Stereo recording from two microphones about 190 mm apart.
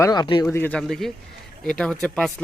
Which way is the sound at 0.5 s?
10° left (ahead or behind).